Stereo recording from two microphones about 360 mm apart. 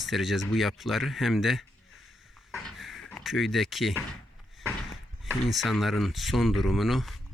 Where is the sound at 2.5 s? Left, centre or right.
Centre.